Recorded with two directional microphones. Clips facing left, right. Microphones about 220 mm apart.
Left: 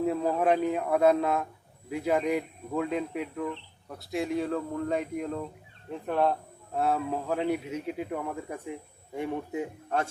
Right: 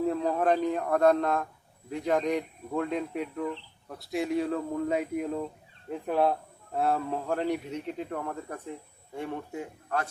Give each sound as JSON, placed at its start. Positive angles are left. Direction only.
{"t": 0.0, "sound": "a man's voice", "side_deg": 5}